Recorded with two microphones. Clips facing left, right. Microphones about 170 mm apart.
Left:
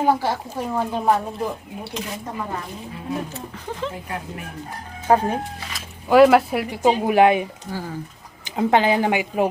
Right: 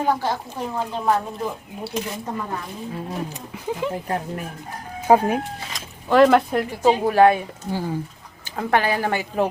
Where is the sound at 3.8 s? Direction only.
10° right (ahead or behind).